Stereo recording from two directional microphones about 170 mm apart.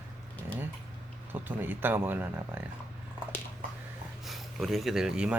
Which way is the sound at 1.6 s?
10° right (ahead or behind).